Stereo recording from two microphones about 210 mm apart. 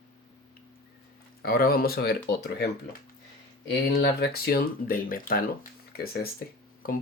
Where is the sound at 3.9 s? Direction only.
50° left (ahead or behind).